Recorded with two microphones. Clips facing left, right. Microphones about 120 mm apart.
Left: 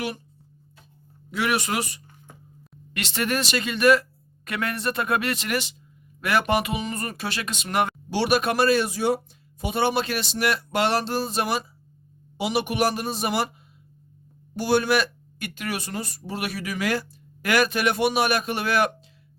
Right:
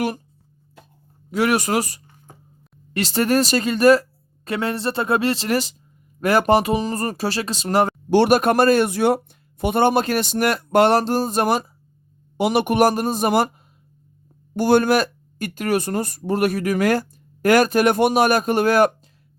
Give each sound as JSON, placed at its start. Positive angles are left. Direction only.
{"t": 1.3, "sound": "speech", "side_deg": -40}
{"t": 8.1, "sound": "speech", "side_deg": -50}
{"t": 14.5, "sound": "speech", "side_deg": -50}